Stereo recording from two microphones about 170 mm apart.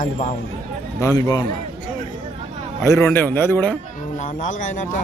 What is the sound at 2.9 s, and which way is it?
Speech, 15° left (ahead or behind).